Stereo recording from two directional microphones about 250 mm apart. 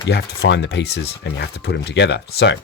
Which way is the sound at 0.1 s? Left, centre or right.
Left.